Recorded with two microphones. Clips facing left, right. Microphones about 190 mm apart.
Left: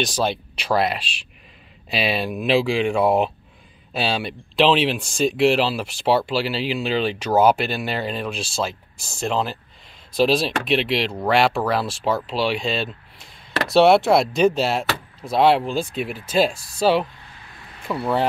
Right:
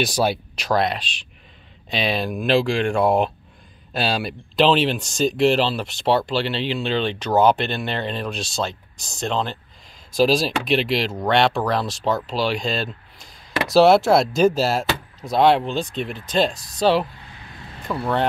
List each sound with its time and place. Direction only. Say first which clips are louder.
0.0 s speech: right 2 dB; 5° right (ahead or behind)
0.6 s speech: left 1 dB; 5° left (ahead or behind)